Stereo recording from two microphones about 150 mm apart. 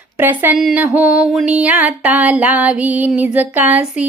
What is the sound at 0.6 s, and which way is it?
Music, centre (ahead or behind).